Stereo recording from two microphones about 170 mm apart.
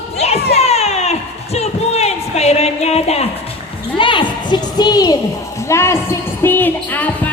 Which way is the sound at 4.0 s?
30° left (ahead or behind).